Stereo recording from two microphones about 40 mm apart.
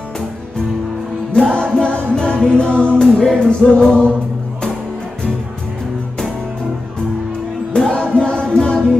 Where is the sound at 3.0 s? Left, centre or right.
Centre.